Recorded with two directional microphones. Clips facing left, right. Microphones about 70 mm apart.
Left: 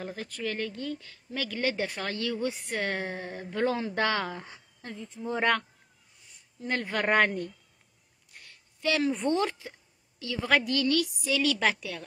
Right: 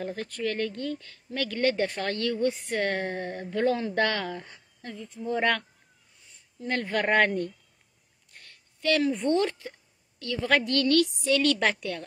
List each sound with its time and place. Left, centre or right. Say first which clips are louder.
0.0 s speech: right 4 dB; centre; by 5.6 s left
6.8 s speech: right 1 dB; centre
8.3 s a sound: even; centre
9.0 s a woman's voice: right 2 dB; left; by 12.0 s centre